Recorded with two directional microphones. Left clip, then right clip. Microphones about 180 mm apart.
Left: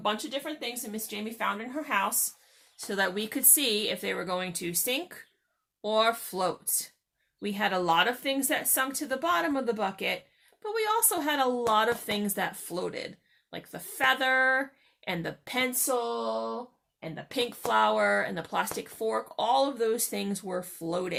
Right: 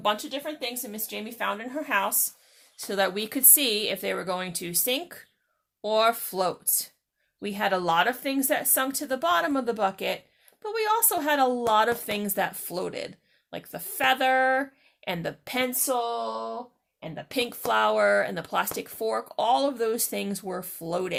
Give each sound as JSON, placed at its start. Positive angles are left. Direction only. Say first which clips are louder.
{"t": 0.0, "sound": "speech", "louder": "right 3 dB", "side_deg": -50}